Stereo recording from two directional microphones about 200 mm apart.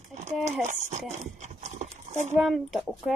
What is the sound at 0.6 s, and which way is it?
Speech, 35° right (ahead or behind).